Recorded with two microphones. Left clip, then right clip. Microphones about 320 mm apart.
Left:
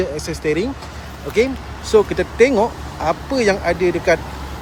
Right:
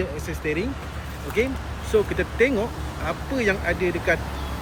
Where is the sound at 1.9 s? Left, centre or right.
Centre.